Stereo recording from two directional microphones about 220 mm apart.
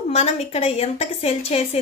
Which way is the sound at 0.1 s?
30° left (ahead or behind).